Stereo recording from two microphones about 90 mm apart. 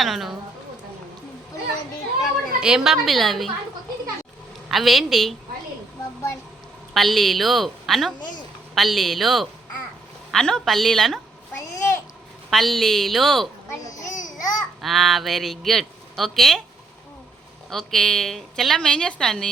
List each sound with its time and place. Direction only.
0.0 s a sound: centre (ahead or behind)
2.6 s a man's voice: 5° right (ahead or behind)
4.7 s a man's voice: centre (ahead or behind)
6.9 s a man's voice: centre (ahead or behind)
11.5 s a sound: 35° left (ahead or behind)
12.5 s a man's voice: centre (ahead or behind)
13.7 s a sound: 40° left (ahead or behind)
14.8 s a man's voice: centre (ahead or behind)
17.7 s a man's voice: 5° left (ahead or behind)